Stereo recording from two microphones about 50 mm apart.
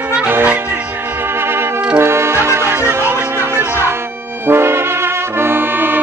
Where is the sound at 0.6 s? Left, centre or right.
Right.